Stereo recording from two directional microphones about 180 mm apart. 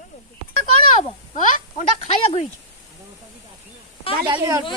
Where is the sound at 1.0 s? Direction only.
40° left (ahead or behind).